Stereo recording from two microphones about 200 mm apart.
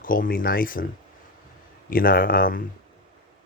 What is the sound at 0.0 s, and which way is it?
Speech, 45° left (ahead or behind).